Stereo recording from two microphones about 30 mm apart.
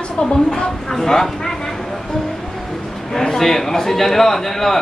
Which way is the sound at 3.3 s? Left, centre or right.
Centre.